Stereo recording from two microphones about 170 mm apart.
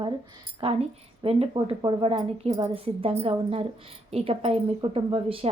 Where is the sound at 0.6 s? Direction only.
35° right (ahead or behind).